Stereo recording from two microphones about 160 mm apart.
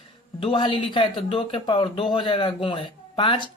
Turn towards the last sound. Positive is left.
turn(degrees=30)  # may be behind; listen again after turning